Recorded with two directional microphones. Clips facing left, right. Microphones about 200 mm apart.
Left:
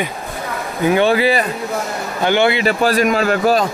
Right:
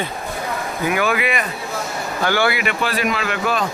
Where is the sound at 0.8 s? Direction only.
30° left (ahead or behind).